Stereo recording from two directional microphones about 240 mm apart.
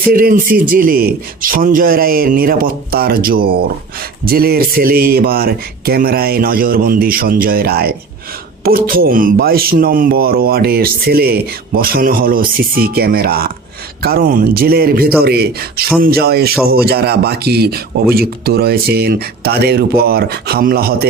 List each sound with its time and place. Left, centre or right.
0.1 s speech: right